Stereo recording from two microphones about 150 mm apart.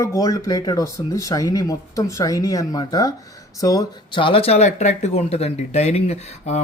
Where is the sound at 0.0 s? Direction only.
20° left (ahead or behind).